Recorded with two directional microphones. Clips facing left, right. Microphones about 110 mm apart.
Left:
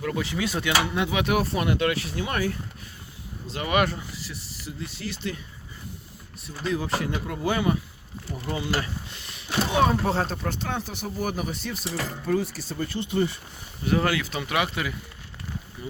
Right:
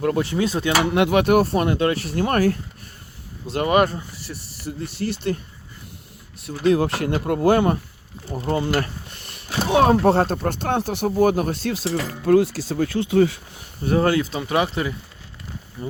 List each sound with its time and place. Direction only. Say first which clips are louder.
0.0 s speech: right 7 dB; 50° right (ahead or behind)
0.7 s speech: right 8 dB; 65° right (ahead or behind)
1.5 s speech: right 5 dB; 35° right (ahead or behind)
2.0 s speech: right 8 dB; 55° right (ahead or behind)
3.7 s speech: right 5 dB; 40° right (ahead or behind)
4.6 s speech: right 8 dB; 55° right (ahead or behind)
6.4 s speech: right 10 dB; 65° right (ahead or behind)
8.3 s speech: right 7 dB; 45° right (ahead or behind); by 13.4 s 90° right
13.8 s speech: right 5 dB; 30° right (ahead or behind)